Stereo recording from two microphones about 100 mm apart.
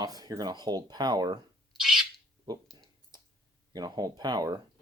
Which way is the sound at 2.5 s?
40° right (ahead or behind).